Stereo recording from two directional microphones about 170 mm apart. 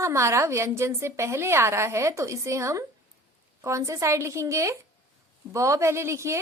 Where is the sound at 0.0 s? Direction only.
15° right (ahead or behind).